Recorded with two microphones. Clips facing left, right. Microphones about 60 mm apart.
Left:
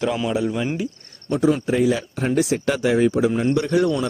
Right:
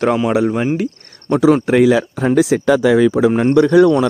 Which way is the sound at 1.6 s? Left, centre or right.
Right.